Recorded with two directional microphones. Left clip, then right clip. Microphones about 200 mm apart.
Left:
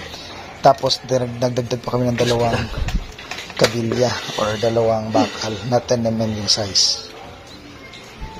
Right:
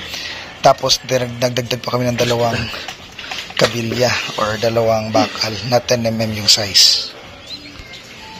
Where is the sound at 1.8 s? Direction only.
10° right (ahead or behind).